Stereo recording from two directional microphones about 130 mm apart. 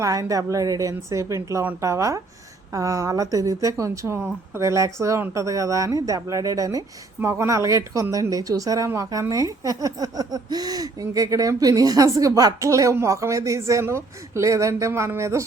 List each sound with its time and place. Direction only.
0.0 s speech: 25° right (ahead or behind)